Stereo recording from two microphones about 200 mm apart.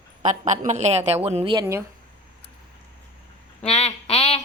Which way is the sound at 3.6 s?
30° left (ahead or behind).